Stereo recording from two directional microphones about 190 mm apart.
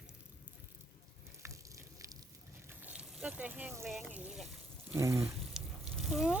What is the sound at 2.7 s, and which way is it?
Water, 10° right (ahead or behind).